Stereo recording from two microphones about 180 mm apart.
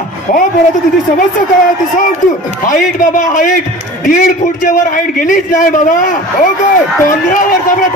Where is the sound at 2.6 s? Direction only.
45° left (ahead or behind).